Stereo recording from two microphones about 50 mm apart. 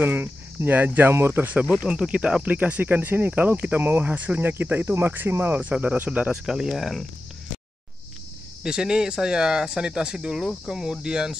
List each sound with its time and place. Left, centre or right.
0.0 s speech: right
1.9 s speech: right
2.4 s speech: right
4.4 s speech: right
5.5 s speech: right
6.4 s speech: centre
8.6 s speech: centre